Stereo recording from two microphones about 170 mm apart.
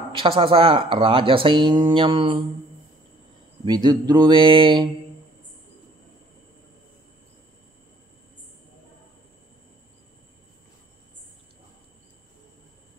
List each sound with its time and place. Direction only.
0.1 s speech: 30° right (ahead or behind)
3.6 s speech: 25° right (ahead or behind)